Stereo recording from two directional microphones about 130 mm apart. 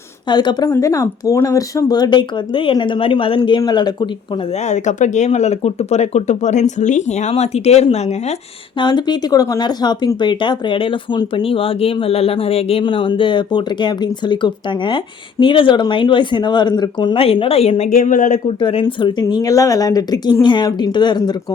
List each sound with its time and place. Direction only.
0.3 s speech: 35° left (ahead or behind)
4.7 s speech: 70° left (ahead or behind)
8.8 s speech: 35° left (ahead or behind)
18.0 s speech: 90° left
18.4 s speech: 45° left (ahead or behind)
19.2 s speech: 25° left (ahead or behind)